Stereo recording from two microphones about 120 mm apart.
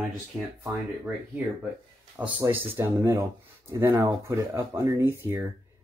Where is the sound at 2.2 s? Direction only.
10° right (ahead or behind).